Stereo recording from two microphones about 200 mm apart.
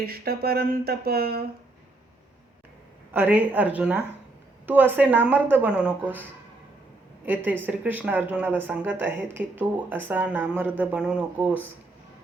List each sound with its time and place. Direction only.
0.0 s speech: 50° right (ahead or behind)
3.1 s speech: 10° right (ahead or behind)
7.3 s speech: 10° right (ahead or behind)